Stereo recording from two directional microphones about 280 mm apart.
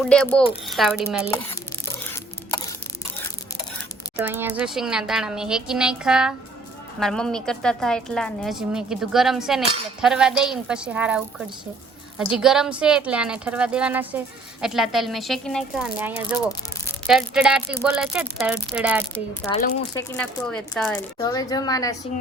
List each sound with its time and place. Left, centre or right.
0.0 s a woman's voice: centre
4.2 s a woman's voice: centre
19.5 s speech: left
20.0 s speech: centre